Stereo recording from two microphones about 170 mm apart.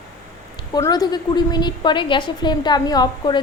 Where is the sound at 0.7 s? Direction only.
25° left (ahead or behind).